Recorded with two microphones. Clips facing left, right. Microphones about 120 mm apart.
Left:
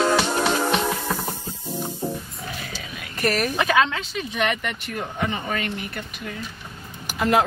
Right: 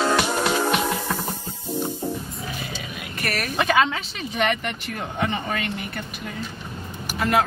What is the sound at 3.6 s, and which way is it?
Speech, centre (ahead or behind).